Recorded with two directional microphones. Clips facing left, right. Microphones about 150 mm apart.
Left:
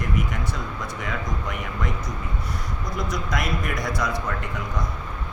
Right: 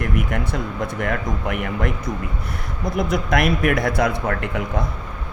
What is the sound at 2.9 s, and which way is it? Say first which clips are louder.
Speech: right 8 dB; 60° right (ahead or behind).